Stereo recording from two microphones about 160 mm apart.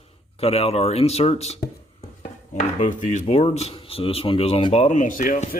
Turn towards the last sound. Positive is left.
turn(degrees=55)  # may be behind; listen again after turning